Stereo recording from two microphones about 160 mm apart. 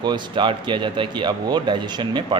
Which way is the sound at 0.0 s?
30° right (ahead or behind).